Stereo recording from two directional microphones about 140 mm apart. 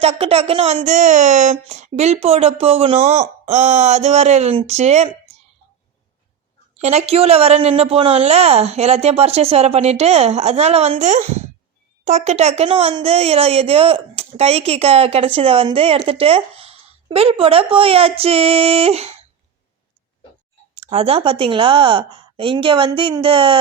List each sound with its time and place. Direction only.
0.0 s speech: 45° right (ahead or behind)
3.4 s speech: 60° right (ahead or behind)
6.7 s speech: 50° right (ahead or behind)
20.9 s a woman's voice: 45° right (ahead or behind)